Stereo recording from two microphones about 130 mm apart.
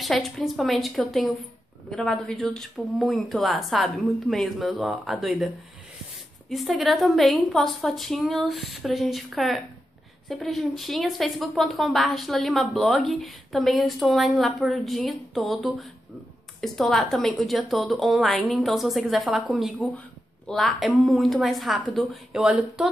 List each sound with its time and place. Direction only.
0.0 s speech: centre (ahead or behind)
6.5 s speech: centre (ahead or behind)